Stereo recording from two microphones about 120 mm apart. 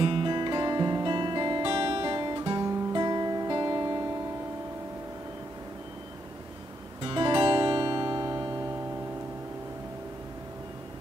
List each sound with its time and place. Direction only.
0.0 s guitar: 45° right (ahead or behind)
7.0 s music: 40° right (ahead or behind)